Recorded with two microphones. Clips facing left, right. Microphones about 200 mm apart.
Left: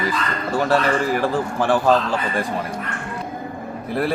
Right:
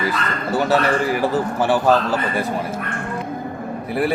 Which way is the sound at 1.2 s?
5° right (ahead or behind).